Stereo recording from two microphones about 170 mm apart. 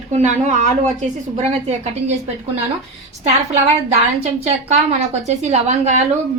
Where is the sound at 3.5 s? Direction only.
40° right (ahead or behind).